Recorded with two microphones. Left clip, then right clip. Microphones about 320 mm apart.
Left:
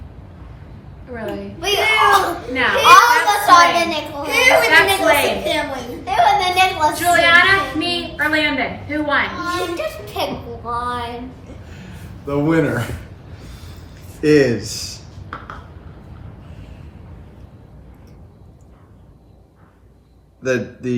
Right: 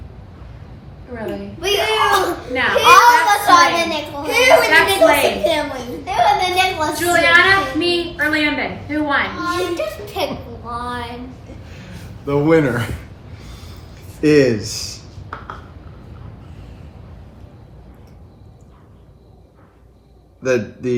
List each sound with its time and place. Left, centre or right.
1.1 s a child's voice: centre
10.8 s a sound: centre
12.2 s speech: right
14.3 s speech: right
20.4 s speech: right